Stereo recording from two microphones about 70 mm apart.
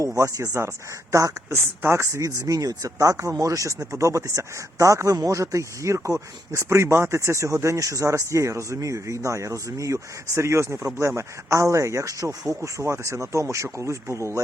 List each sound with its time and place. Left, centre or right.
0.2 s speech: right